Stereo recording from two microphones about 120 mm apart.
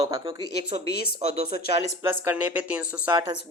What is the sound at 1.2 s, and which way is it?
Speech, 70° right (ahead or behind).